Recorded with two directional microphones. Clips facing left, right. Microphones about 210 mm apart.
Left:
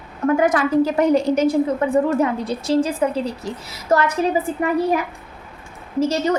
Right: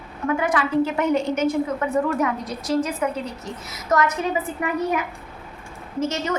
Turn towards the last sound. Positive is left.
turn(degrees=35)  # may be behind; listen again after turning